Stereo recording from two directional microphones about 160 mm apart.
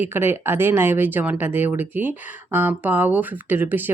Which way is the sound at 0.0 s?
15° right (ahead or behind).